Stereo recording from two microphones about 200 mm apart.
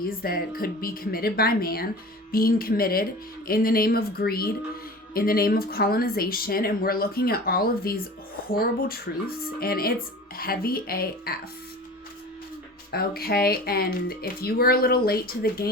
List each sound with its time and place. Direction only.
0.0 s a woman's voice: 45° left (ahead or behind)
9.6 s a woman's voice: 50° left (ahead or behind)
12.9 s a woman's voice: 50° left (ahead or behind)